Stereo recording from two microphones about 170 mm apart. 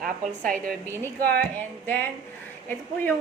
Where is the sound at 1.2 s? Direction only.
70° right (ahead or behind).